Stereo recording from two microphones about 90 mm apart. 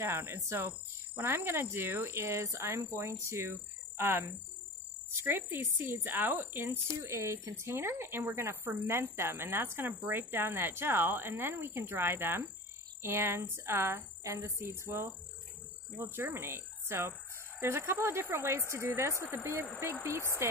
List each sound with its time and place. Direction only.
0.0 s a woman's voice: 30° right (ahead or behind)